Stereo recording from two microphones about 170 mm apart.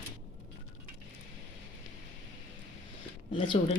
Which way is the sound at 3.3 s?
30° left (ahead or behind).